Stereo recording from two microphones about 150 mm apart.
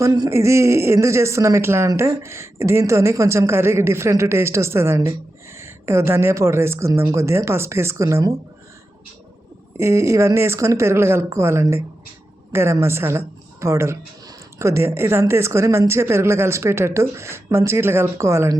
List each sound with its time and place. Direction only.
0.0 s a man's voice: 20° right (ahead or behind)
9.7 s a woman's voice: 20° right (ahead or behind)